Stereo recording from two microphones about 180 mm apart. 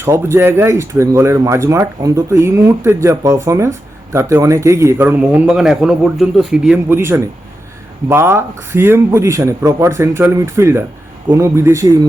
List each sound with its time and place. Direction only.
0.0 s speech: 15° right (ahead or behind)
6.8 s speech: 15° right (ahead or behind)